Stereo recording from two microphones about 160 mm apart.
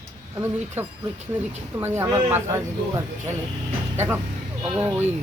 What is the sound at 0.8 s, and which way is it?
Speech, 15° right (ahead or behind).